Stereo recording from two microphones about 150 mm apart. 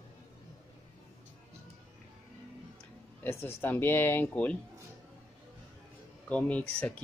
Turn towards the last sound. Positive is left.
turn(degrees=10)  # may be behind; listen again after turning